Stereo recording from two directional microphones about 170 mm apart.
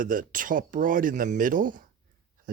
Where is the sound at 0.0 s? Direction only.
55° right (ahead or behind).